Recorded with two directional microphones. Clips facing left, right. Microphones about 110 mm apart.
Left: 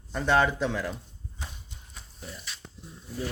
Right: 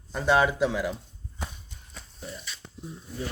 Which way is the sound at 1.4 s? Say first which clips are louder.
Right 5 dB; 55° right (ahead or behind).